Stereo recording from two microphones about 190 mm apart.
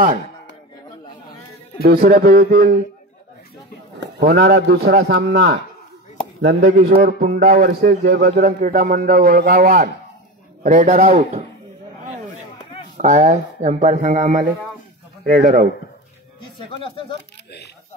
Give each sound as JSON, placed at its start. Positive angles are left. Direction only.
{"t": 1.8, "sound": "a man's voice", "side_deg": -55}
{"t": 4.2, "sound": "a man's voice", "side_deg": -60}
{"t": 12.9, "sound": "a man's voice", "side_deg": -40}